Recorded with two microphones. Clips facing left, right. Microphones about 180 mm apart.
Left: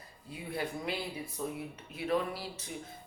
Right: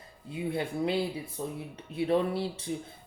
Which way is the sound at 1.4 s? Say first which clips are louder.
Left 1 dB; 35° right (ahead or behind).